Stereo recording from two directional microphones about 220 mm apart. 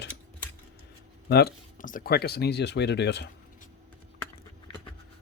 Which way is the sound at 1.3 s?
45° left (ahead or behind).